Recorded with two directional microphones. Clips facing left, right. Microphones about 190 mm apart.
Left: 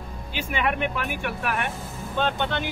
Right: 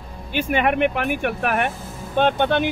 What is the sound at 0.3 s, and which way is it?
Speech, 55° right (ahead or behind).